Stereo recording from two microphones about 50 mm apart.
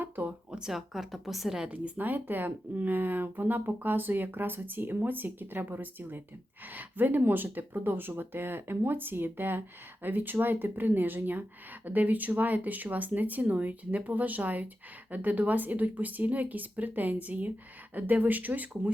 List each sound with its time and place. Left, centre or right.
0.3 s speech: centre
0.7 s a woman's voice: centre
1.7 s speech: right